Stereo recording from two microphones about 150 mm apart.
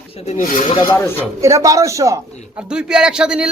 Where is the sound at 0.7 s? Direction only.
30° left (ahead or behind).